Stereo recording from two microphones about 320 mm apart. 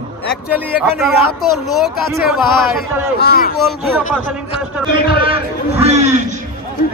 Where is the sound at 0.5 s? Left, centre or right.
Centre.